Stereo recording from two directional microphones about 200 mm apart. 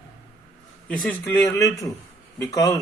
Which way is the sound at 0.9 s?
10° left (ahead or behind).